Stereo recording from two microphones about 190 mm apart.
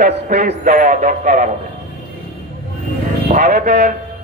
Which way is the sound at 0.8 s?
40° right (ahead or behind).